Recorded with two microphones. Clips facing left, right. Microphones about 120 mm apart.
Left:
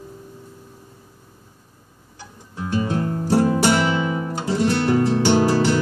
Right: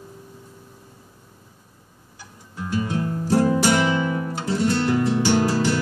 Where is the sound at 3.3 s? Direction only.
15° left (ahead or behind).